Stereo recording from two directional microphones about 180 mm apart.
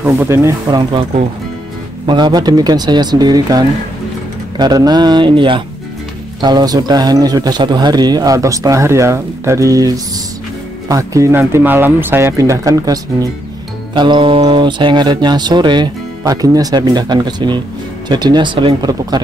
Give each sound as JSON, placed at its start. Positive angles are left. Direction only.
{"t": 0.0, "sound": "speech", "side_deg": -10}
{"t": 2.0, "sound": "speech", "side_deg": -25}